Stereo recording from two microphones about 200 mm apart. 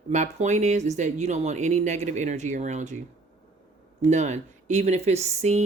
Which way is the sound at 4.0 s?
35° right (ahead or behind).